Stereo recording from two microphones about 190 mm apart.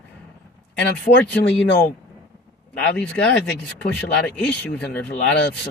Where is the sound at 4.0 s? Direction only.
5° left (ahead or behind).